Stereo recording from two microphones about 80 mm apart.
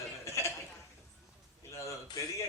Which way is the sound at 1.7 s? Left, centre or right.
Left.